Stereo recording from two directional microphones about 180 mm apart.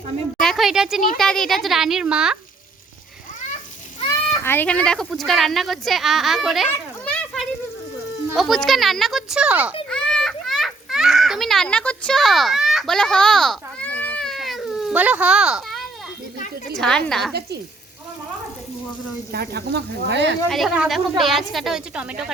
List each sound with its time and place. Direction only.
0.3 s a woman's voice: centre (ahead or behind)
4.4 s speech: 10° left (ahead or behind)
6.7 s children playing: 5° left (ahead or behind)
8.4 s speech: centre (ahead or behind)
9.9 s children playing: 5° left (ahead or behind)
16.8 s speech: 5° left (ahead or behind)
19.3 s speech: 65° right (ahead or behind)
20.5 s speech: centre (ahead or behind)